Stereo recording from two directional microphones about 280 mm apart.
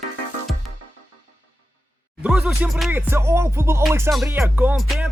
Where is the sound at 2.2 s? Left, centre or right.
Centre.